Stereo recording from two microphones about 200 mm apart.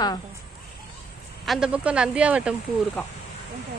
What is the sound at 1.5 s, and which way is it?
Speech, 5° right (ahead or behind).